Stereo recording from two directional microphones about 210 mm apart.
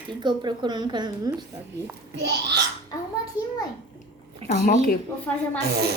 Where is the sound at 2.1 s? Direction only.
55° right (ahead or behind).